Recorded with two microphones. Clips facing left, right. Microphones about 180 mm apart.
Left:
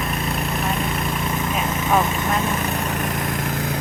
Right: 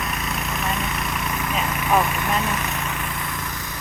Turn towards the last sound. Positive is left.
turn(degrees=60)  # may be behind; listen again after turning